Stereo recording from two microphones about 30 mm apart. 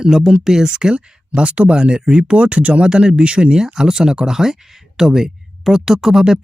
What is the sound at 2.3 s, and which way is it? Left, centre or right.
Speech, right.